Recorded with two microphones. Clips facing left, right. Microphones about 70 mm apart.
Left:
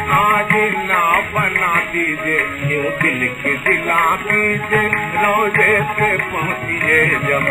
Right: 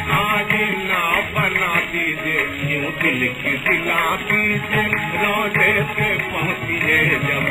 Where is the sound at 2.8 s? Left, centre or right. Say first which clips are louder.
Left 2 dB; left.